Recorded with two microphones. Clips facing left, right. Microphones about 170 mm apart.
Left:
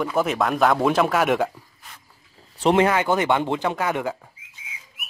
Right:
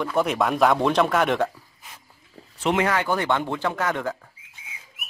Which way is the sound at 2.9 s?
20° left (ahead or behind).